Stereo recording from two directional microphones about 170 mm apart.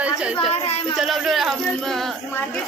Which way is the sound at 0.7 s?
35° left (ahead or behind).